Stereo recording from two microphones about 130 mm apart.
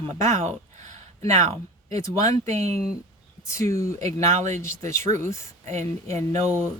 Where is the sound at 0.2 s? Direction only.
65° right (ahead or behind).